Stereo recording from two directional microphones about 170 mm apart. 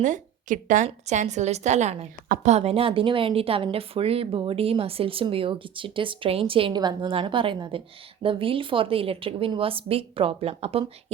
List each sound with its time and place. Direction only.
0.0 s a woman's voice: 50° right (ahead or behind)